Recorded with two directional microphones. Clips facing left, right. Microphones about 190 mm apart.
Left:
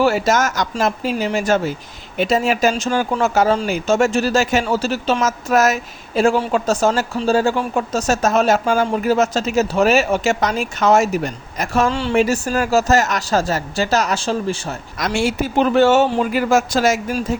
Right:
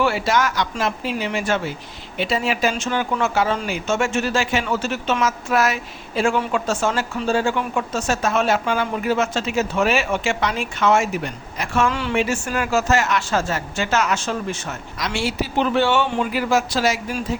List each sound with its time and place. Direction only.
0.0 s speech: 45° left (ahead or behind)
14.9 s a man's voice: 50° left (ahead or behind)